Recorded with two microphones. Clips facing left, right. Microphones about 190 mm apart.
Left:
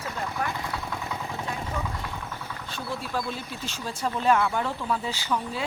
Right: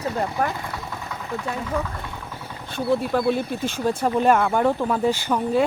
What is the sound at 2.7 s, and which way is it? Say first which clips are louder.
Speech: right 11 dB; 60° right (ahead or behind).